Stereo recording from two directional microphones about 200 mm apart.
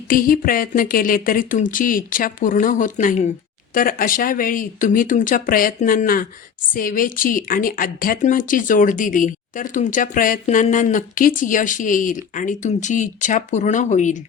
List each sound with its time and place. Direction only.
0.1 s a woman's voice: 45° left (ahead or behind)